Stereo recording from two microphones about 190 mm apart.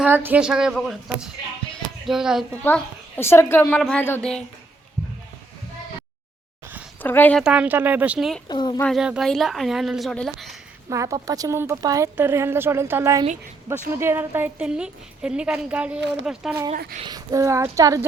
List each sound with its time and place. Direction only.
0.0 s speech: 10° right (ahead or behind)
2.6 s a woman's voice: 10° left (ahead or behind)
7.0 s a woman's voice: 10° left (ahead or behind)
7.4 s a woman's voice: 5° right (ahead or behind)
8.4 s speech: 20° left (ahead or behind)
8.8 s speech: centre (ahead or behind)
10.8 s a woman's voice: 15° right (ahead or behind)
16.7 s speech: 50° right (ahead or behind)
17.0 s a woman's voice: 20° right (ahead or behind)